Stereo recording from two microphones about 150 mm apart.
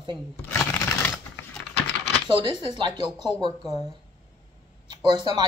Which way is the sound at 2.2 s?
30° right (ahead or behind).